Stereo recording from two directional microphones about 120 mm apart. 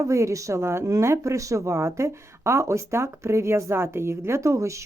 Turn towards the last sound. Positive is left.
turn(degrees=-25)  # may be behind; listen again after turning